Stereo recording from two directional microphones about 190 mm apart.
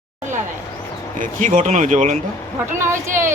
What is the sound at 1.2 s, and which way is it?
Speech, 40° right (ahead or behind).